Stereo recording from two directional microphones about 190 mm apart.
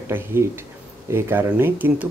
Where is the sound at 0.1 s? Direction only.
10° right (ahead or behind).